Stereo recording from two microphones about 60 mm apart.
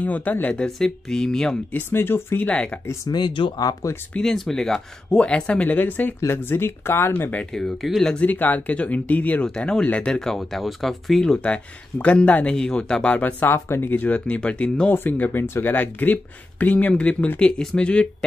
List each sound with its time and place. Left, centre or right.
0.0 s speech: left
0.7 s speech: centre
1.7 s speech: left
2.3 s speech: left
3.1 s speech: left
4.2 s speech: centre
5.2 s speech: centre
5.8 s speech: left
6.2 s speech: left
7.5 s speech: centre
8.2 s speech: left; by 10.3 s centre
10.3 s speech: centre
11.3 s speech: left
13.5 s speech: left; by 18.0 s centre